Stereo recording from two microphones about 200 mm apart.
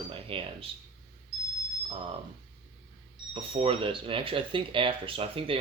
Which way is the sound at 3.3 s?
30° right (ahead or behind).